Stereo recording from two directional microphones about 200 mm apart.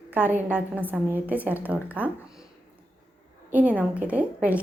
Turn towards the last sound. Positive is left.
turn(degrees=-5)  # may be behind; listen again after turning